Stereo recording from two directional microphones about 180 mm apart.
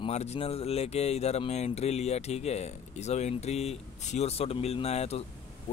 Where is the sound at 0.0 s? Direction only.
35° left (ahead or behind).